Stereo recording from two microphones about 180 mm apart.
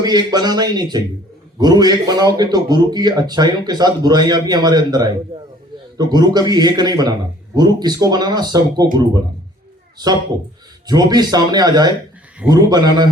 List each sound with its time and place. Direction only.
0.0 s a man's voice: 20° right (ahead or behind)
10.8 s a man's voice: 20° right (ahead or behind)